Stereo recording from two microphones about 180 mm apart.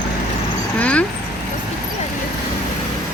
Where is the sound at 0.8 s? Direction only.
5° left (ahead or behind).